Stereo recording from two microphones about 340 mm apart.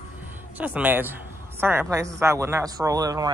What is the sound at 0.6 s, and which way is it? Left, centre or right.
A woman's voice, centre.